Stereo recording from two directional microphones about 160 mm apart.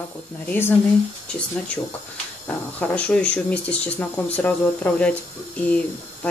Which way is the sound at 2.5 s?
10° left (ahead or behind).